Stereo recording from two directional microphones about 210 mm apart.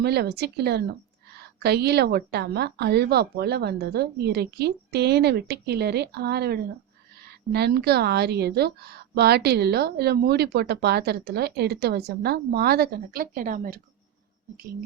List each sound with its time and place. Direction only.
0.0 s a woman's voice: 50° right (ahead or behind)